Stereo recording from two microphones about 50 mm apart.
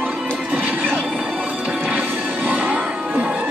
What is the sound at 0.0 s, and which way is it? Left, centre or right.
Music, right.